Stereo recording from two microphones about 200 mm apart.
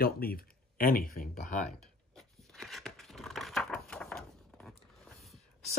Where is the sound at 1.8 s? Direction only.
Centre (ahead or behind).